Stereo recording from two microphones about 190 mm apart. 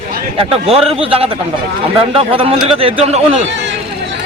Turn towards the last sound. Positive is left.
turn(degrees=-35)  # may be behind; listen again after turning